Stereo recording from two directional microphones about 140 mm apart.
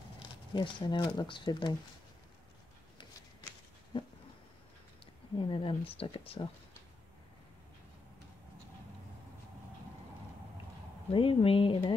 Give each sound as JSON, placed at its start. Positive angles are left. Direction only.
{"t": 0.6, "sound": "speech", "side_deg": 35}
{"t": 5.4, "sound": "speech", "side_deg": 40}
{"t": 11.1, "sound": "speech", "side_deg": 40}